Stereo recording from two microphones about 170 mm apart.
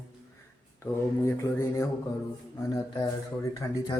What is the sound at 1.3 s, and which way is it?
Speech, 15° left (ahead or behind).